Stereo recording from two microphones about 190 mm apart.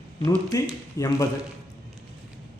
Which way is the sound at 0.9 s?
15° left (ahead or behind).